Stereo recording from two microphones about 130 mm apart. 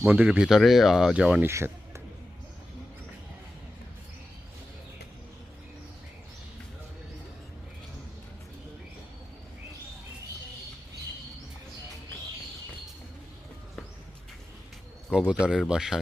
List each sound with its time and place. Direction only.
0.0 s speech: 10° right (ahead or behind)
1.5 s a man's voice: 20° right (ahead or behind)
15.3 s speech: 5° right (ahead or behind)